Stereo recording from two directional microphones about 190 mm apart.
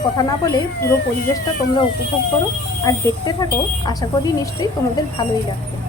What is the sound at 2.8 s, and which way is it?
Speech, 20° left (ahead or behind).